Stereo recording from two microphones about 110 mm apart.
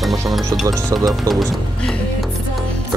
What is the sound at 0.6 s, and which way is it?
Speech, 25° right (ahead or behind).